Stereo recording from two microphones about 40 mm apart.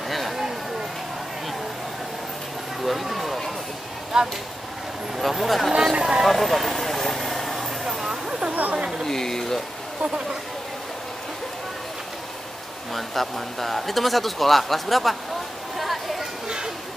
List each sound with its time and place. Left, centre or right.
2.8 s vehicle: centre
4.1 s speech: centre
5.1 s speech: centre
5.9 s speech: right
6.2 s vehicle: centre
8.7 s speech: right
9.0 s speech: centre
12.9 s speech: centre
15.8 s a sound: centre
16.4 s a sound: right